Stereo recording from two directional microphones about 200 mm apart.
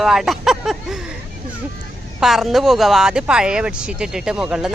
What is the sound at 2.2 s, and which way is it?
Speech, centre (ahead or behind).